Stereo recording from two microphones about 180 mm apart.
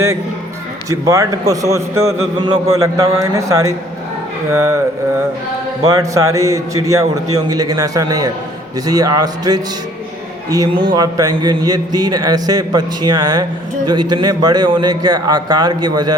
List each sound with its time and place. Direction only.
0.9 s a man's voice: 15° right (ahead or behind)
5.9 s a man's voice: 15° right (ahead or behind)